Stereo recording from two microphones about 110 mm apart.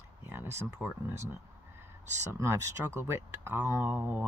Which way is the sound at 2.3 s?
25° right (ahead or behind).